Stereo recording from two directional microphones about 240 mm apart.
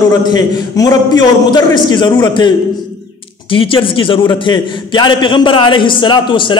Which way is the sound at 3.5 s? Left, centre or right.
Left.